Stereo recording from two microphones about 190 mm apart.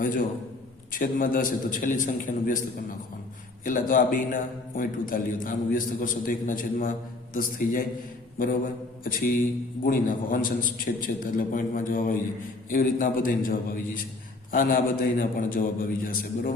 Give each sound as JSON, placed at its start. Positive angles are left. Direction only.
{"t": 0.0, "sound": "a man's voice", "side_deg": 45}